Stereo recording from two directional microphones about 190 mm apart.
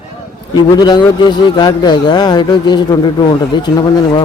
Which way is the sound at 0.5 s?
20° left (ahead or behind).